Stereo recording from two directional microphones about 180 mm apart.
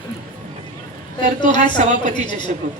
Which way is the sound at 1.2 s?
45° right (ahead or behind).